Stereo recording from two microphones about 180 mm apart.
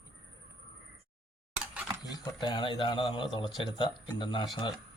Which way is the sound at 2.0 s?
25° left (ahead or behind).